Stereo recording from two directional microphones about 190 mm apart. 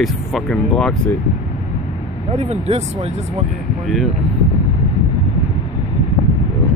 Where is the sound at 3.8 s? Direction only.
Centre (ahead or behind).